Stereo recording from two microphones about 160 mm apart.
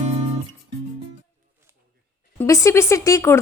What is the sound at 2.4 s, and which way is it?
A woman's voice, 20° left (ahead or behind).